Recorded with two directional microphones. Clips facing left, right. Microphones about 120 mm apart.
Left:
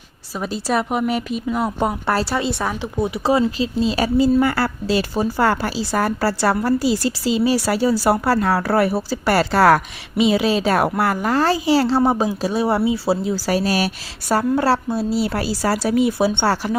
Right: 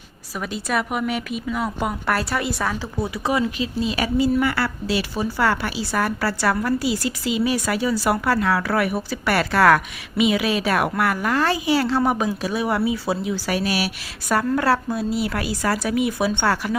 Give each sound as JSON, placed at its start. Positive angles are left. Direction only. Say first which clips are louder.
{"t": 0.3, "sound": "speech", "louder": "left 3 dB", "side_deg": 30}
{"t": 14.3, "sound": "speech", "louder": "left 2 dB", "side_deg": 30}